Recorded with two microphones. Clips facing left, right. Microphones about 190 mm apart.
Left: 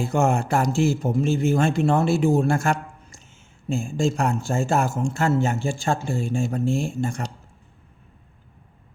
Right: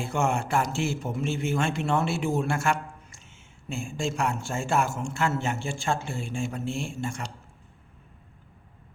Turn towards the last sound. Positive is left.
turn(degrees=40)  # may be behind; listen again after turning